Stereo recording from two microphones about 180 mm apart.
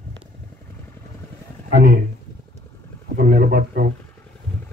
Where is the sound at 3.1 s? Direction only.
55° right (ahead or behind).